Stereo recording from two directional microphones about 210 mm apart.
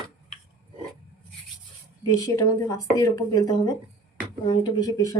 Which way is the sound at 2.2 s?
15° left (ahead or behind).